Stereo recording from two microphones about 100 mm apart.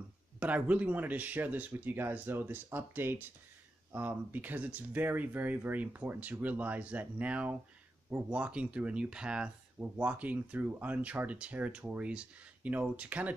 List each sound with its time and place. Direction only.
0.4 s speech: 15° right (ahead or behind)